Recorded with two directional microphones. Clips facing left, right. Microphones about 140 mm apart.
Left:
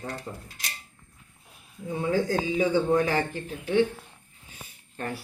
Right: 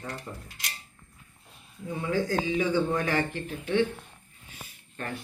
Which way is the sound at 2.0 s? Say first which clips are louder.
Left 2 dB; 25° left (ahead or behind).